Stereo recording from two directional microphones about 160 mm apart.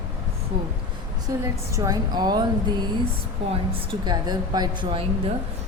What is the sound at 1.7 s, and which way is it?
Speech, 20° right (ahead or behind).